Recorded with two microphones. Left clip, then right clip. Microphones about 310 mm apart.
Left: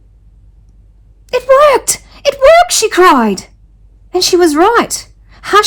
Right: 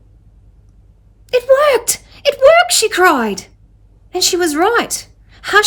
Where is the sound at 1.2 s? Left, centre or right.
Centre.